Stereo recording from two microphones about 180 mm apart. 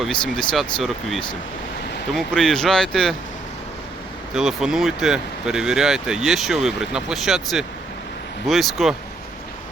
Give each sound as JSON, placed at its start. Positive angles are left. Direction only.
{"t": 0.0, "sound": "speech", "side_deg": 0}
{"t": 4.4, "sound": "speech", "side_deg": -5}